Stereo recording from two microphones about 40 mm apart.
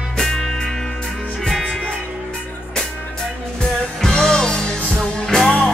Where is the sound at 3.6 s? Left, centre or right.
Centre.